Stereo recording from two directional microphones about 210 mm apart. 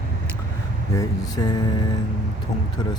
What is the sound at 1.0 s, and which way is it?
Music, 20° left (ahead or behind).